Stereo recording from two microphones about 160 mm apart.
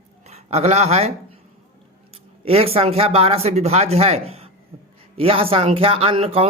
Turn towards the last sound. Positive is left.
turn(degrees=-35)  # may be behind; listen again after turning